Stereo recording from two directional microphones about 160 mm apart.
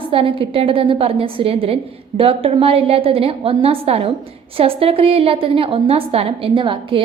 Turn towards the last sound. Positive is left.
turn(degrees=-35)  # may be behind; listen again after turning